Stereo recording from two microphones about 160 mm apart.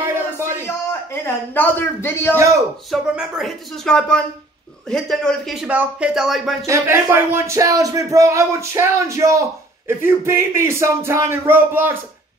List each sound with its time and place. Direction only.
0.0 s a sound: 15° right (ahead or behind)
0.7 s a man's voice: 15° left (ahead or behind)
2.9 s speech: centre (ahead or behind)
6.6 s speech: 15° right (ahead or behind)